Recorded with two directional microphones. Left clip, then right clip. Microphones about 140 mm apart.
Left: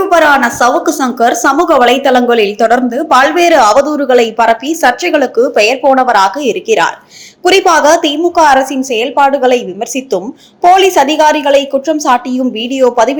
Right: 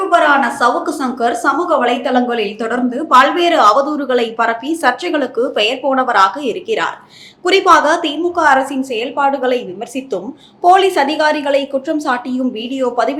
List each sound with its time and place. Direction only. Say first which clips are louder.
0.1 s a woman's voice: left 3 dB; 55° left (ahead or behind)